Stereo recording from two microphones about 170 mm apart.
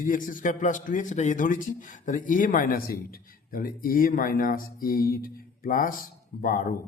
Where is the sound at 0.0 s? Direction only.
50° left (ahead or behind).